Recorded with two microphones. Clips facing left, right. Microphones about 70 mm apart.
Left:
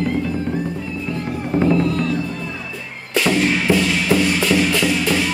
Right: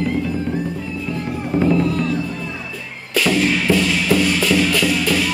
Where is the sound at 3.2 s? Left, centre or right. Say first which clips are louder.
Even; left.